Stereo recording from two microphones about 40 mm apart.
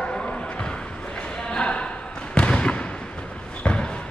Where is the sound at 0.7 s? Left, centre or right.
Centre.